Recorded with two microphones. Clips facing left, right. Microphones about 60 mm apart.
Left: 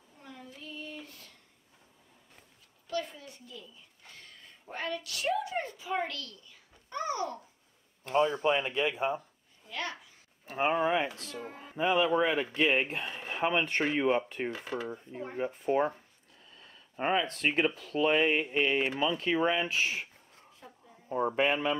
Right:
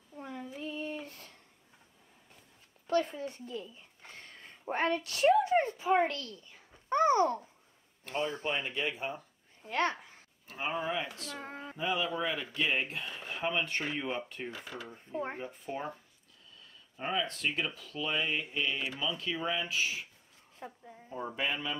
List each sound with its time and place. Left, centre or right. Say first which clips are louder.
0.2 s child singing: right 7 dB; right
2.9 s speech: right 6 dB; right
8.1 s speech: left 7 dB; left
8.7 s speech: left 5 dB; centre
9.7 s a child's voice: right 6 dB; right
10.5 s speech: left 7 dB; left
11.3 s music: left 1 dB; right
11.7 s speech: left 7 dB; left
20.5 s a sound: right 8 dB; right
21.3 s speech: left 6 dB; left